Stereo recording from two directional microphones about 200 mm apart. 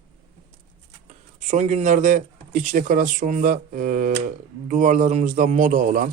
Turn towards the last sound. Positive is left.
turn(degrees=-40)  # may be behind; listen again after turning